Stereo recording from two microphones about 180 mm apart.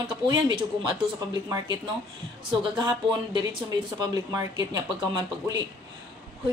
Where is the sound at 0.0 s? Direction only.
25° right (ahead or behind).